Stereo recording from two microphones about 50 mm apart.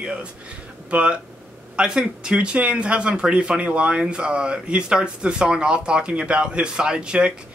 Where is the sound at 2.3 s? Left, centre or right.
Right.